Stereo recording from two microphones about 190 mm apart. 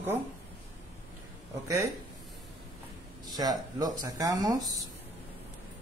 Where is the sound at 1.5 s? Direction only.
15° right (ahead or behind).